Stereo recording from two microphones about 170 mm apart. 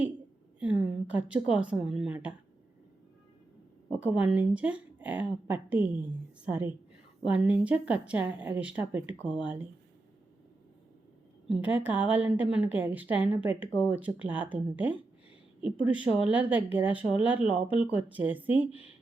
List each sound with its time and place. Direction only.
0.6 s a woman's voice: 10° right (ahead or behind)
4.0 s a woman's voice: 5° right (ahead or behind)
11.4 s a woman's voice: 10° right (ahead or behind)